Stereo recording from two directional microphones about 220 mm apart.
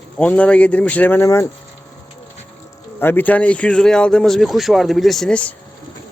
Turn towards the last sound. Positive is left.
turn(degrees=5)  # may be behind; listen again after turning